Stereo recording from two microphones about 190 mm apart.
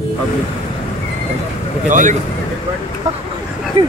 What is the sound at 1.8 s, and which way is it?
Speech, 40° right (ahead or behind).